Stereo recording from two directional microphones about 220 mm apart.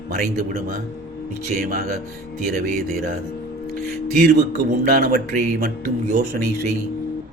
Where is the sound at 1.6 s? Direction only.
40° right (ahead or behind).